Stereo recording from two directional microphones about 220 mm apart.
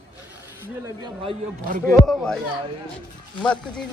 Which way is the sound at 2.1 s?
Centre (ahead or behind).